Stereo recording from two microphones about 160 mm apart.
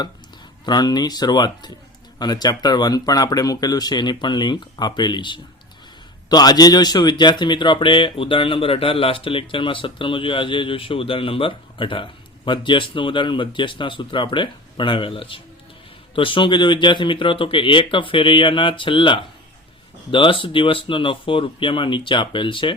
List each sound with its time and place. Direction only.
0.6 s speech: 25° left (ahead or behind)